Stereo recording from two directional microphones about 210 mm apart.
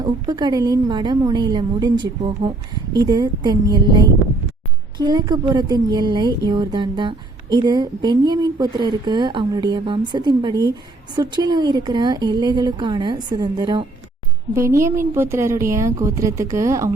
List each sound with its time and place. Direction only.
0.0 s a woman's voice: 20° right (ahead or behind)